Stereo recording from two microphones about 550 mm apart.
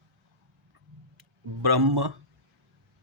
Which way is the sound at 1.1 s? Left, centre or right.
Right.